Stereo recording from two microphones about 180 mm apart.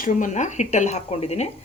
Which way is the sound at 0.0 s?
45° left (ahead or behind).